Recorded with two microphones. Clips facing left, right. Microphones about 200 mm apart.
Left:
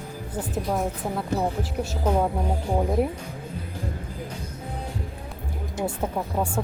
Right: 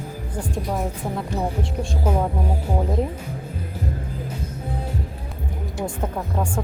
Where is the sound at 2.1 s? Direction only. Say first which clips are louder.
Even; 10° right (ahead or behind).